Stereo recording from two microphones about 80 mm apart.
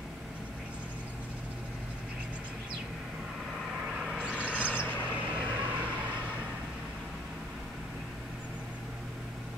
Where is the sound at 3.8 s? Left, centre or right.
Centre.